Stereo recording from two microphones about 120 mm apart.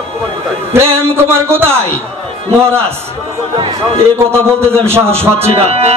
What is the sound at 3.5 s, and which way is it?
Speech, 50° right (ahead or behind).